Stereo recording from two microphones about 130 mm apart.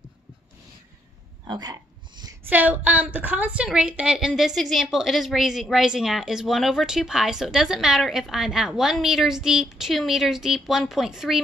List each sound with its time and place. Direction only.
1.5 s hiccup: 35° right (ahead or behind)
2.5 s a woman's voice: 15° right (ahead or behind)